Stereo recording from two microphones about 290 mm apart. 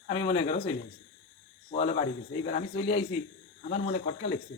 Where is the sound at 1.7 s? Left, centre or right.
Left.